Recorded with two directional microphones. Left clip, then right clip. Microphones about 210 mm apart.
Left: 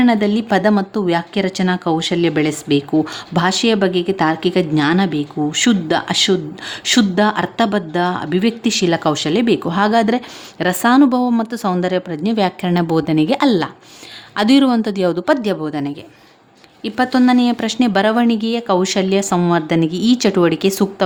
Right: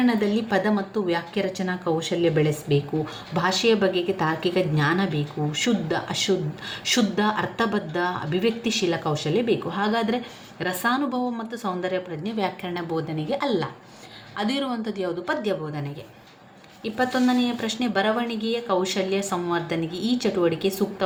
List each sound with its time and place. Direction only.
0.0 s a woman's voice: 50° left (ahead or behind)